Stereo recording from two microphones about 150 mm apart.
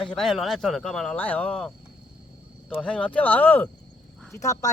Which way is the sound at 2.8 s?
10° left (ahead or behind).